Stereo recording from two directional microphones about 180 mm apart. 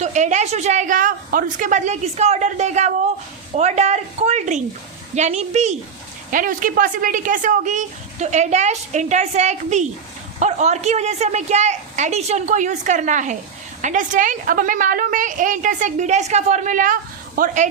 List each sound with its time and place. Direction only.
0.0 s a woman's voice: 40° right (ahead or behind)
6.3 s a woman's voice: 50° right (ahead or behind)